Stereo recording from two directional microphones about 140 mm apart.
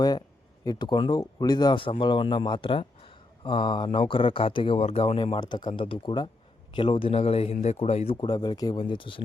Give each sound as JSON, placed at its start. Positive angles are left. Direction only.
{"t": 0.6, "sound": "speech", "side_deg": 30}
{"t": 8.2, "sound": "speech", "side_deg": 30}